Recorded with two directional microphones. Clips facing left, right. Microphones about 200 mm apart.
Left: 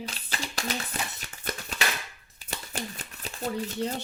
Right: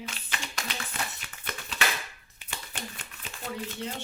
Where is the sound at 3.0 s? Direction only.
40° left (ahead or behind).